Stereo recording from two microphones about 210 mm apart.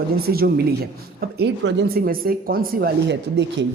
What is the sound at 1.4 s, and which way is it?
Speech, 55° right (ahead or behind).